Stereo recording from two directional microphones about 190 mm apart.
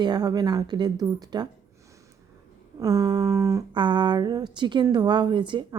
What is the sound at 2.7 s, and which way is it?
A woman's voice, 20° right (ahead or behind).